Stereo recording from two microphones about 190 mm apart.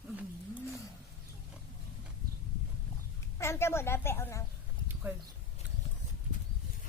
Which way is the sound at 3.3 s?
15° left (ahead or behind).